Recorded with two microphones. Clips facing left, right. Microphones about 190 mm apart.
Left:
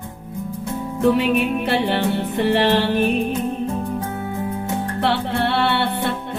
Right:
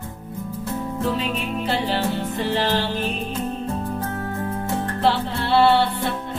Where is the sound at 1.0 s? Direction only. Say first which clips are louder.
Left 10 dB; 65° left (ahead or behind).